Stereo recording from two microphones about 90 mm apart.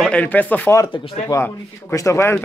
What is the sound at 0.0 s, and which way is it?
Speech, 15° left (ahead or behind).